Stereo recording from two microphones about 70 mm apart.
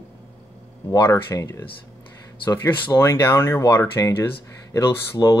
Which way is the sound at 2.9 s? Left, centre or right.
Left.